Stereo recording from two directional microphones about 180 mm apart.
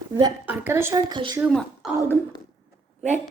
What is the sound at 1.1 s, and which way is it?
Speech, 25° right (ahead or behind).